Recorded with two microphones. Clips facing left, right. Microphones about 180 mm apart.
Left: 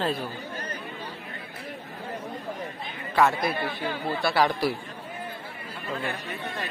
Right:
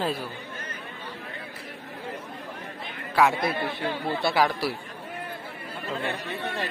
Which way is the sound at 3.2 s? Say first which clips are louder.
Even; 10° right (ahead or behind).